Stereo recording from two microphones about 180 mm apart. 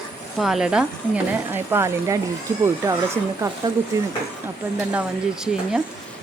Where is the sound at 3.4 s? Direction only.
15° right (ahead or behind).